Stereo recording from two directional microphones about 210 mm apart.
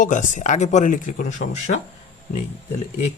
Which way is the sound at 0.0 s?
35° left (ahead or behind).